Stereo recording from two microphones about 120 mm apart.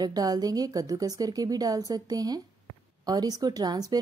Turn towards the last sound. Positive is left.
turn(degrees=-30)  # may be behind; listen again after turning